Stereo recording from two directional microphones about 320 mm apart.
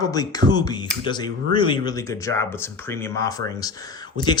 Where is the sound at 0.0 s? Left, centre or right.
Centre.